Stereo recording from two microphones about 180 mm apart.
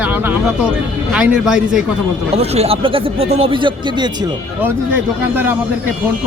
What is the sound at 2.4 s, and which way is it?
Speech, 35° right (ahead or behind).